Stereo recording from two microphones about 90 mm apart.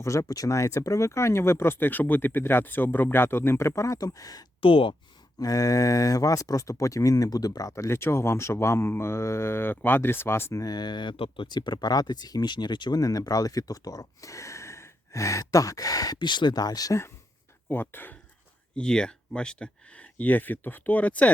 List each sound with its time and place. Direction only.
0.0 s speech: 35° left (ahead or behind)
4.6 s speech: 80° left
5.4 s speech: 40° left (ahead or behind)
10.6 s speech: 50° left (ahead or behind)
16.1 s speech: 60° left (ahead or behind); by 17.0 s 45° left (ahead or behind)
17.7 s speech: 25° left (ahead or behind)
18.8 s speech: 10° left (ahead or behind)